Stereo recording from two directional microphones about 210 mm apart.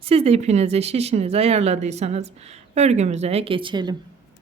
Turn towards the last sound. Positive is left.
turn(degrees=-20)  # may be behind; listen again after turning